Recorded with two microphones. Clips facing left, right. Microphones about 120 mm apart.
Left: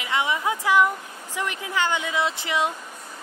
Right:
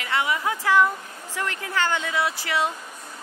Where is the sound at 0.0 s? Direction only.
20° left (ahead or behind).